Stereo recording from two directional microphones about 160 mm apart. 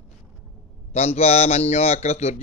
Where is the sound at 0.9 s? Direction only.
40° left (ahead or behind).